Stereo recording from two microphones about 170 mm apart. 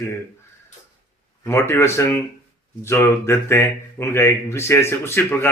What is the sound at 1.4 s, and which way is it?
Speech, 15° left (ahead or behind).